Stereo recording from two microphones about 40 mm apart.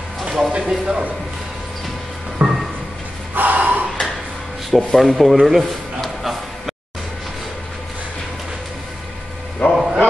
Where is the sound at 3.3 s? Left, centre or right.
Right.